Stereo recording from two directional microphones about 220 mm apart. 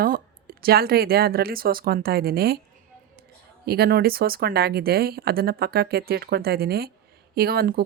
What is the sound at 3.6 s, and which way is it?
Speech, 45° right (ahead or behind).